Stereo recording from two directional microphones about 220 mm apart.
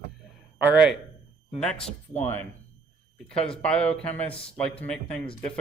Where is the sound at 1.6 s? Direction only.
5° left (ahead or behind).